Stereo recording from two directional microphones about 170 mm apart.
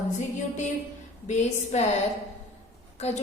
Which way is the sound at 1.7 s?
40° left (ahead or behind).